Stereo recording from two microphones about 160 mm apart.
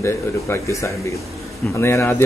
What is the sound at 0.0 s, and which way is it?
Speech, 20° left (ahead or behind).